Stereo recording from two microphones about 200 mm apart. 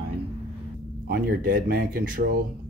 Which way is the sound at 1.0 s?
50° right (ahead or behind).